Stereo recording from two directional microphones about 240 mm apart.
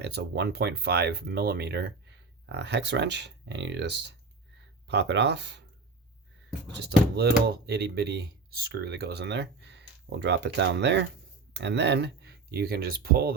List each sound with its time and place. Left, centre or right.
0.0 s speech: right
6.7 s speech: right